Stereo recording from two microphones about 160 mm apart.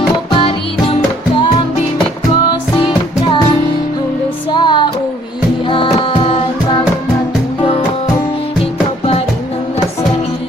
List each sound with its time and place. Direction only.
0.3 s music: 35° left (ahead or behind)
2.7 s music: 30° left (ahead or behind)
4.5 s music: 30° left (ahead or behind)